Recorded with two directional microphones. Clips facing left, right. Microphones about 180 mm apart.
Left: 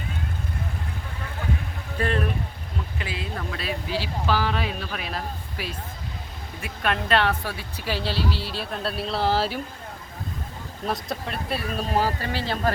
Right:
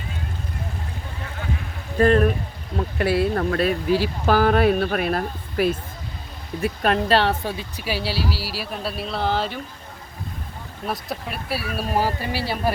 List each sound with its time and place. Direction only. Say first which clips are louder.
2.0 s speech: right 9 dB; 45° right (ahead or behind)
2.7 s speech: right 12 dB; 55° right (ahead or behind)
6.6 s speech: right 6 dB; 35° right (ahead or behind); by 9.6 s 5° left (ahead or behind)
10.8 s speech: even; 5° right (ahead or behind)